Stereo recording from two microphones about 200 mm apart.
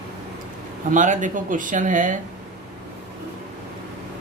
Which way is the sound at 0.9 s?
40° right (ahead or behind).